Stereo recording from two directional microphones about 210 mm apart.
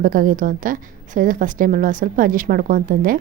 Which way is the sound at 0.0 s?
40° right (ahead or behind).